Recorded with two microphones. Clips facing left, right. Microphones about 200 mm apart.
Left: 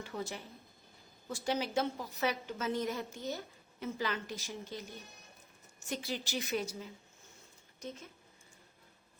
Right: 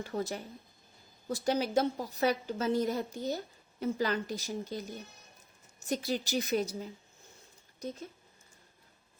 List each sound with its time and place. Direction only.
0.0 s a woman's voice: 40° right (ahead or behind)
5.9 s a woman's voice: 40° right (ahead or behind)